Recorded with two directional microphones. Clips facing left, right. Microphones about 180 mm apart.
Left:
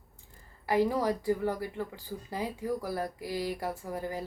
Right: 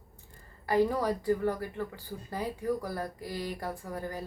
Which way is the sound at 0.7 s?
10° left (ahead or behind).